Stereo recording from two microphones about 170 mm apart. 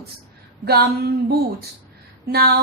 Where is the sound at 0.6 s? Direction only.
70° right (ahead or behind).